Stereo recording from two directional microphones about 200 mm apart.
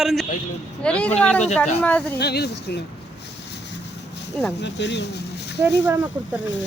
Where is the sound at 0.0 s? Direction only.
Centre (ahead or behind).